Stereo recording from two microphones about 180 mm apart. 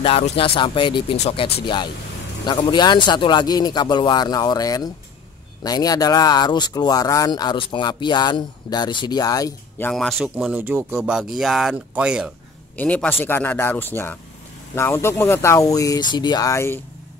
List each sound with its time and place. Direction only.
0.0 s speech: 30° left (ahead or behind)
9.8 s speech: centre (ahead or behind)
12.7 s speech: 10° left (ahead or behind)